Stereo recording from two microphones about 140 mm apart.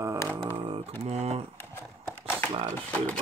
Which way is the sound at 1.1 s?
50° right (ahead or behind).